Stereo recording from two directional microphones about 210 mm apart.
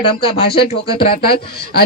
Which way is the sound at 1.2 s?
50° left (ahead or behind).